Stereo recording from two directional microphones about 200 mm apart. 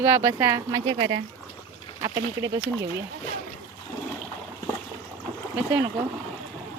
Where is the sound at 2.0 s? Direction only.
20° right (ahead or behind).